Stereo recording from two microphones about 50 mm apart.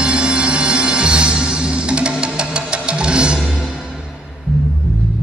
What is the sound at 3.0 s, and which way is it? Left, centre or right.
Music, centre.